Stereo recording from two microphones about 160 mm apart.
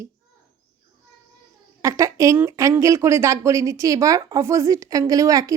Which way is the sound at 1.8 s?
20° right (ahead or behind).